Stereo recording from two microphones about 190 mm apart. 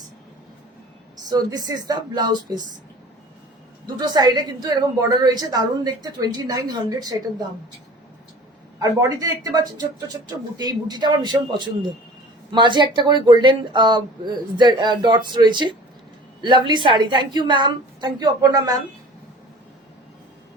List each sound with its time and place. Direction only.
1.3 s a woman's voice: 20° right (ahead or behind)
3.8 s a woman's voice: 20° right (ahead or behind)
8.8 s a woman's voice: 20° right (ahead or behind)